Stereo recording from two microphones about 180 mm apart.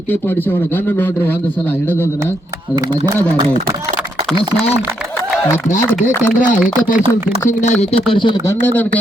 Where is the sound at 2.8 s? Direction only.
20° right (ahead or behind).